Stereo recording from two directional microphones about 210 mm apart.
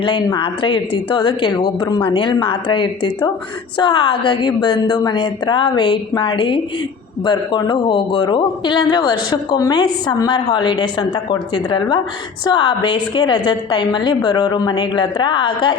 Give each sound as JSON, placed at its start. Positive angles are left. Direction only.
{"t": 0.0, "sound": "a man's voice", "side_deg": 20}